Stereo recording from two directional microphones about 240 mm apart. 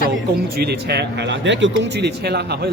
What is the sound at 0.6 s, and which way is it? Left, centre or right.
Speech, right.